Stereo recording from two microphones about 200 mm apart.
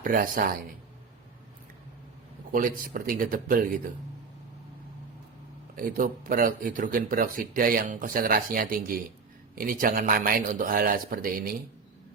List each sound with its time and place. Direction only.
0.0 s speech: 45° right (ahead or behind)
2.5 s speech: 45° right (ahead or behind)
5.7 s speech: 45° right (ahead or behind)